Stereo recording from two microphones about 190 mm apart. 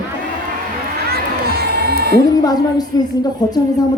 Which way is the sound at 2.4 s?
20° left (ahead or behind).